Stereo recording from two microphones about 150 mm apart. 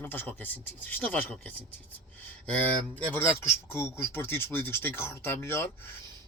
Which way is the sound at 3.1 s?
15° left (ahead or behind).